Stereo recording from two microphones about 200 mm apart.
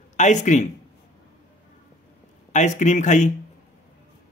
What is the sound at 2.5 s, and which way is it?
Speech, 35° left (ahead or behind).